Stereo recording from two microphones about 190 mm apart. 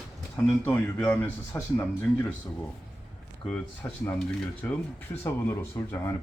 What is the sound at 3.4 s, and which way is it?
Speech, 5° left (ahead or behind).